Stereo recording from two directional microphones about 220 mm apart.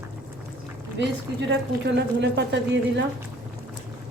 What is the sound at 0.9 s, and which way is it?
A woman's voice, 50° right (ahead or behind).